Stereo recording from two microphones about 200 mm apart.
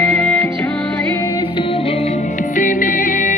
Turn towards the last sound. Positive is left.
turn(degrees=40)  # may be behind; listen again after turning